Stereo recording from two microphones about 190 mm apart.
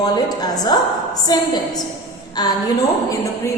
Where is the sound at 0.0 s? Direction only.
20° left (ahead or behind).